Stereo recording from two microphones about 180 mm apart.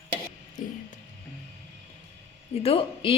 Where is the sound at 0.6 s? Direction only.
45° left (ahead or behind).